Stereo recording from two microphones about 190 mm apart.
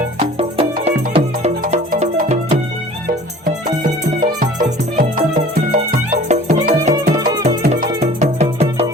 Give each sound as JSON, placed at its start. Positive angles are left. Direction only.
{"t": 0.3, "sound": "music", "side_deg": -30}
{"t": 6.7, "sound": "music", "side_deg": -50}
{"t": 7.2, "sound": "music", "side_deg": -20}
{"t": 7.9, "sound": "music", "side_deg": -35}